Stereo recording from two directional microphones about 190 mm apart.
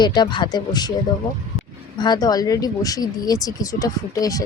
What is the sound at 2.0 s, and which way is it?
A woman's voice, 20° left (ahead or behind).